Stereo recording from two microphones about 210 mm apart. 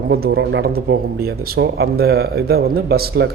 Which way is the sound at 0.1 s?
50° right (ahead or behind).